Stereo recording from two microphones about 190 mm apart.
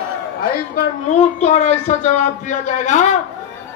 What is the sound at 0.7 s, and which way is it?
A man's voice, 40° left (ahead or behind).